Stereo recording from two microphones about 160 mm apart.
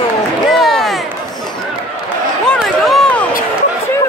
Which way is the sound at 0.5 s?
Centre (ahead or behind).